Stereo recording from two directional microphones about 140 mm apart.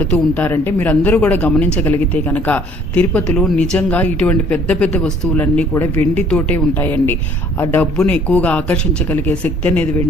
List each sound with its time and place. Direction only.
0.0 s speech: 10° left (ahead or behind)